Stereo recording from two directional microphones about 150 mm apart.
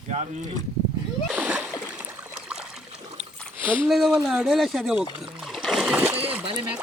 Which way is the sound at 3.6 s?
10° right (ahead or behind).